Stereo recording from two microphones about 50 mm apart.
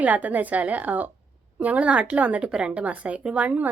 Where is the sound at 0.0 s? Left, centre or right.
Right.